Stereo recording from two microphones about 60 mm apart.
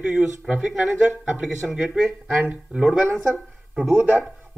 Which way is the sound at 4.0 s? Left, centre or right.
Right.